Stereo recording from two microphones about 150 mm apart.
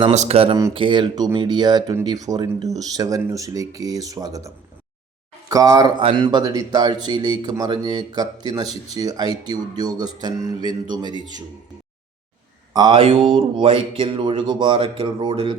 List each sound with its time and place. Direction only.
0.1 s speech: 45° right (ahead or behind); by 5.9 s 25° right (ahead or behind)
6.0 s speech: 35° right (ahead or behind)
12.7 s speech: 30° right (ahead or behind)